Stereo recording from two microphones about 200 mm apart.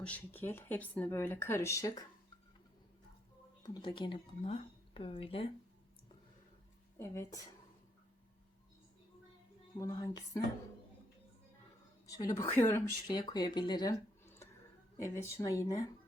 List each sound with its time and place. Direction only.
0.0 s speech: 10° left (ahead or behind)
3.6 s speech: 20° left (ahead or behind)
7.0 s speech: 15° left (ahead or behind)
9.7 s speech: 20° left (ahead or behind)
12.0 s speech: 15° left (ahead or behind)